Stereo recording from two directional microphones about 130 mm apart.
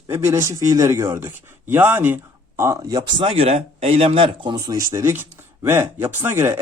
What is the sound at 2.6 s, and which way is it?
A man's voice, 25° right (ahead or behind).